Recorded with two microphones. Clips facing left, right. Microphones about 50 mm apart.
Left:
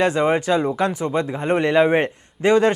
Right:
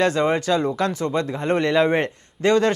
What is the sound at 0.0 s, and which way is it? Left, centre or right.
Speech, centre.